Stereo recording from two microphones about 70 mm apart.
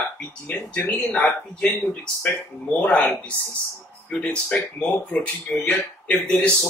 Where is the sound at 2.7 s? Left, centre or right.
Centre.